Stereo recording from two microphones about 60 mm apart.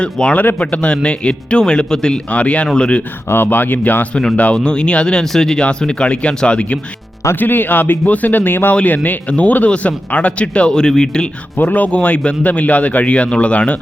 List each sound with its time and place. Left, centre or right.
0.0 s a man's voice: centre
3.2 s speech: left
4.5 s a man's voice: centre
7.3 s a man's voice: left; by 11.3 s centre
11.5 s a man's voice: left